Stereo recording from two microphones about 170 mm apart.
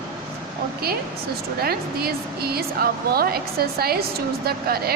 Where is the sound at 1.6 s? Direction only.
65° right (ahead or behind).